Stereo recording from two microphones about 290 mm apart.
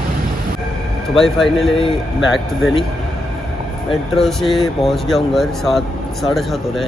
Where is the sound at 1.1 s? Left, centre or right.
Centre.